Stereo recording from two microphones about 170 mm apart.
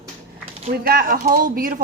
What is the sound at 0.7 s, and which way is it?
Speech, 60° right (ahead or behind).